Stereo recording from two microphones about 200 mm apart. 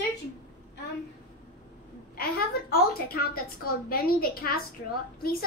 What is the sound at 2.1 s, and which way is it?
A woman's voice, 50° left (ahead or behind).